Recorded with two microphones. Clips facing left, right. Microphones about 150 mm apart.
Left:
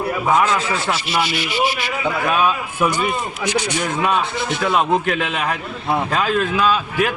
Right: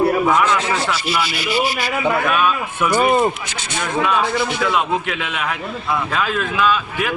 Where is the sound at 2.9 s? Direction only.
45° right (ahead or behind).